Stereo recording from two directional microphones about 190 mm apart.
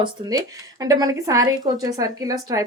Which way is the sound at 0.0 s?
20° right (ahead or behind).